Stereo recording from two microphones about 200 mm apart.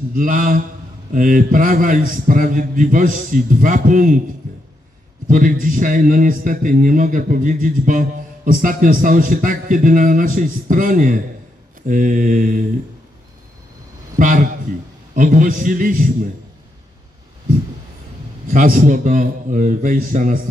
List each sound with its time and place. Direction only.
0.1 s a man's voice: 45° right (ahead or behind)
5.3 s a man's voice: 45° right (ahead or behind)
14.1 s a man's voice: 45° right (ahead or behind)
18.5 s a man's voice: 45° right (ahead or behind)